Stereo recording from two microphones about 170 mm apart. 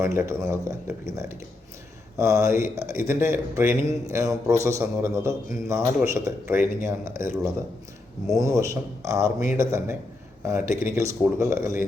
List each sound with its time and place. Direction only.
0.0 s speech: 15° right (ahead or behind)